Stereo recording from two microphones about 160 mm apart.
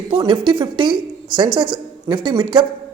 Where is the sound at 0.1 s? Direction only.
30° right (ahead or behind).